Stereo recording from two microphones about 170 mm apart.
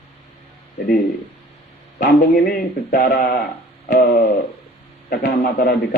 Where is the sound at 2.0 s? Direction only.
60° left (ahead or behind).